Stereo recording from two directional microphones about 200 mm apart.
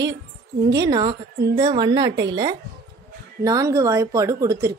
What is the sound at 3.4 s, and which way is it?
A woman's voice, 15° right (ahead or behind).